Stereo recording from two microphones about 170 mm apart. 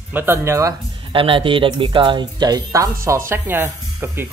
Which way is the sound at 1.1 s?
30° right (ahead or behind).